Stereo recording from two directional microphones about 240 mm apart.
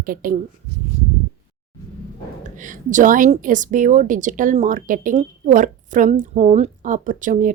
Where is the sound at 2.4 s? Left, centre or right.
Right.